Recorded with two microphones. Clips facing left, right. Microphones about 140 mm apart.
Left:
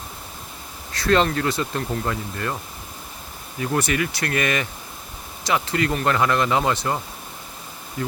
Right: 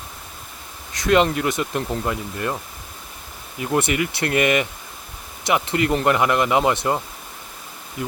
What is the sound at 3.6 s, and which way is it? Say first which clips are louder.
Speech: right 2 dB; 20° right (ahead or behind).